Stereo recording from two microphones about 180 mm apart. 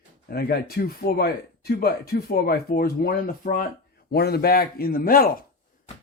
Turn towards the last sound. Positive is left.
turn(degrees=55)  # may be behind; listen again after turning